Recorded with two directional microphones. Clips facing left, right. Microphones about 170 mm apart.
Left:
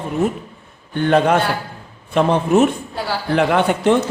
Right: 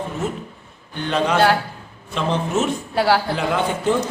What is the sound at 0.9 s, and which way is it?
A man's voice, 55° left (ahead or behind).